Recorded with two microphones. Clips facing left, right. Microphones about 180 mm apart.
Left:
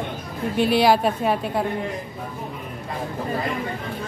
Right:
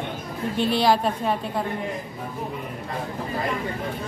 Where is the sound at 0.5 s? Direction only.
5° left (ahead or behind).